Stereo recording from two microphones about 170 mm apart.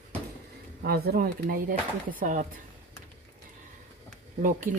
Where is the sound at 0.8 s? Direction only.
65° right (ahead or behind).